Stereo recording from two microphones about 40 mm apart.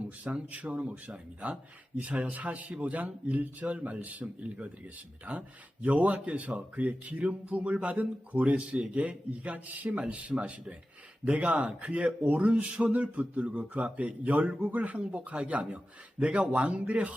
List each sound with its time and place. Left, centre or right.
0.5 s a man's voice: right
5.8 s a man's voice: right
10.0 s a man's voice: right
12.6 s a man's voice: right